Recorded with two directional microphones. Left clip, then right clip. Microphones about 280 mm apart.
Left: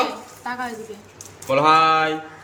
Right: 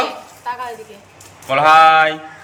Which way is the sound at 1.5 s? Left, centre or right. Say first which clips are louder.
Right 6 dB; centre.